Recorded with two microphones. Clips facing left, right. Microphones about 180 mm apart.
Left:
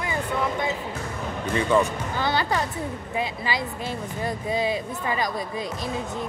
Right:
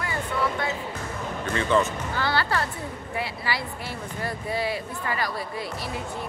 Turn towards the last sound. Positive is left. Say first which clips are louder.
# left 3 dB
turn(degrees=20)  # may be behind; listen again after turning